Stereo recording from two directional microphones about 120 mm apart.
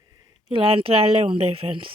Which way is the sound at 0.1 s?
30° right (ahead or behind).